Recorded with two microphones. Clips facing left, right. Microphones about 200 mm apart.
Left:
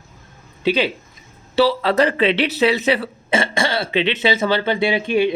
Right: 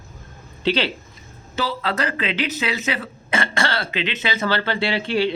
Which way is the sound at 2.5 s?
35° left (ahead or behind).